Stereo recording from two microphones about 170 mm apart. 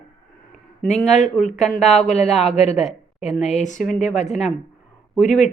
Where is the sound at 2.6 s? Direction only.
40° left (ahead or behind).